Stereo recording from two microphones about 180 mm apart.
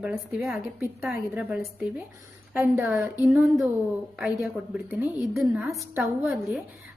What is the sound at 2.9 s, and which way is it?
Speech, centre (ahead or behind).